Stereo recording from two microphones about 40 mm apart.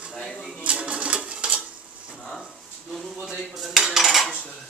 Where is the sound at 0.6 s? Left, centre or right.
Right.